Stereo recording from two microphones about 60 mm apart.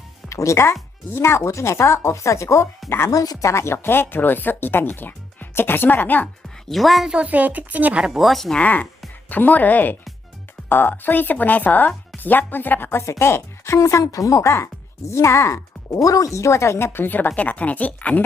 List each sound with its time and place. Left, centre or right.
0.3 s speech: left
3.1 s speech: left
3.5 s speech: left
6.7 s a woman's voice: centre
7.3 s speech: right
8.2 s a woman's voice: centre
8.5 s speech: left
14.0 s speech: left
16.0 s speech: left